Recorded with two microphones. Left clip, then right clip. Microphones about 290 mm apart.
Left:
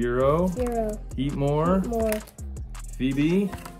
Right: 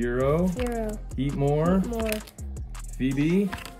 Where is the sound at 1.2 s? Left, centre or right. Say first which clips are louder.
Even; left.